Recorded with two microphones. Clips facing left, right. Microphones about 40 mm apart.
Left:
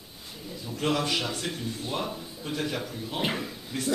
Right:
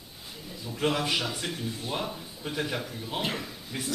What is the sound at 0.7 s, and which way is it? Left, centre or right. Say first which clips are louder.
A man's voice: even; centre.